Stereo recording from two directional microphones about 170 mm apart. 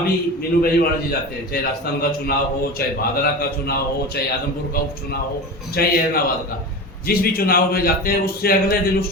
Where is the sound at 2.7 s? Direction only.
65° left (ahead or behind).